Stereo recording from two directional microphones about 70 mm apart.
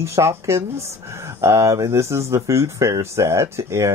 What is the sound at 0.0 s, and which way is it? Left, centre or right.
Speech, right.